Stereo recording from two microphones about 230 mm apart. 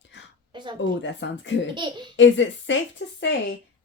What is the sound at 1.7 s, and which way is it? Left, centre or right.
Speech, centre.